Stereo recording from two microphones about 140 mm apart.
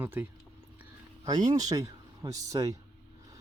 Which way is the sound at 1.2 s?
30° right (ahead or behind).